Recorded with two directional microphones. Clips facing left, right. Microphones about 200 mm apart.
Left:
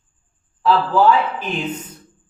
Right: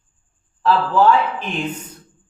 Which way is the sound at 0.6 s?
5° left (ahead or behind).